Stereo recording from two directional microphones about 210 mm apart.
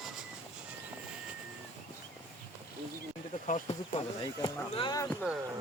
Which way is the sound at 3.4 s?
35° left (ahead or behind).